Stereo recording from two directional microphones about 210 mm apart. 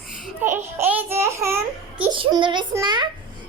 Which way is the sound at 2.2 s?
25° right (ahead or behind).